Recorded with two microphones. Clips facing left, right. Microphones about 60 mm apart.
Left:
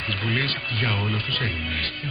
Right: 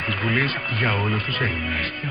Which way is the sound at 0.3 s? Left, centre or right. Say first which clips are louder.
Right 3 dB; right.